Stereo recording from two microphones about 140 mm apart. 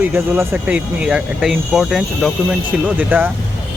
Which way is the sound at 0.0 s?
15° right (ahead or behind).